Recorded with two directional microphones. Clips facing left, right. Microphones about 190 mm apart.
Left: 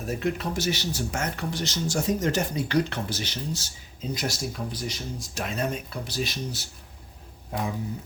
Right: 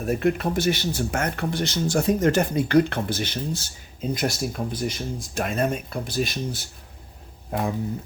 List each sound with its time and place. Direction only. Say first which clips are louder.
0.0 s speech: right 6 dB; 55° right (ahead or behind)